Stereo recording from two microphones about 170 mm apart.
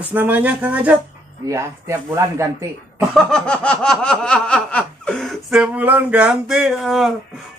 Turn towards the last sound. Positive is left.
turn(degrees=0)  # may be behind; listen again after turning